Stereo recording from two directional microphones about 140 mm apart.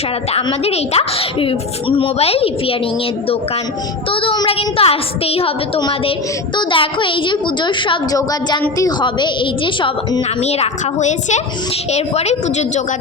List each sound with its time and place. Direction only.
0.6 s speech: 45° left (ahead or behind)
4.1 s a woman's voice: 40° left (ahead or behind)
10.4 s speech: 50° left (ahead or behind)